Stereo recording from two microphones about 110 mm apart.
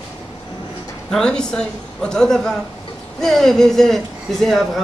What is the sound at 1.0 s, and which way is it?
A man's voice, 5° left (ahead or behind).